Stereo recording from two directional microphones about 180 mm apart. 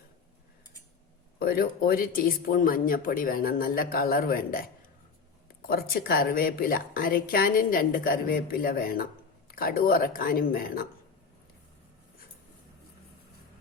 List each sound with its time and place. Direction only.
1.4 s speech: 55° left (ahead or behind)
5.6 s speech: 55° left (ahead or behind)